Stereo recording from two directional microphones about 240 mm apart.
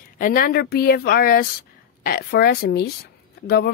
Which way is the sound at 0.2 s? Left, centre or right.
Left.